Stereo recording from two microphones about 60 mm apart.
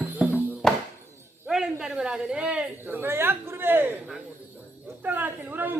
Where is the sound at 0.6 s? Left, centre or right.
Centre.